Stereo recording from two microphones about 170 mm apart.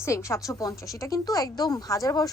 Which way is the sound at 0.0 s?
15° left (ahead or behind).